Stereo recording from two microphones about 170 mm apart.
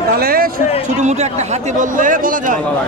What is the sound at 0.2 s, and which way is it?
Speech, 60° right (ahead or behind).